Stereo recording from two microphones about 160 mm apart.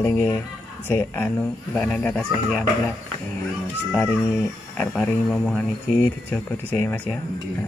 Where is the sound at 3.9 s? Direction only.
10° left (ahead or behind).